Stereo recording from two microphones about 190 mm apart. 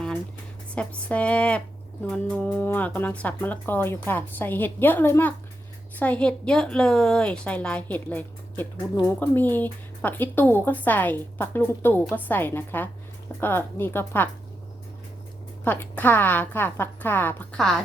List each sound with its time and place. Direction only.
0.7 s a woman's voice: 5° left (ahead or behind)
15.6 s speech: 10° left (ahead or behind)